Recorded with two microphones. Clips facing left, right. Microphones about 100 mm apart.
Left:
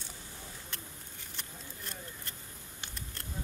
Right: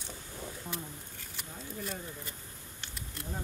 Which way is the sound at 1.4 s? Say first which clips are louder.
Right 7 dB; 5° right (ahead or behind).